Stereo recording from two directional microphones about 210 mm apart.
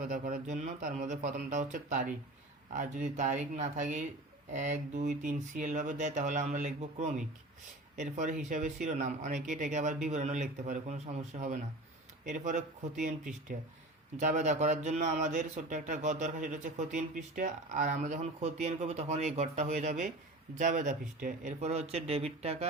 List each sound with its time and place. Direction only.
0.1 s speech: 35° right (ahead or behind)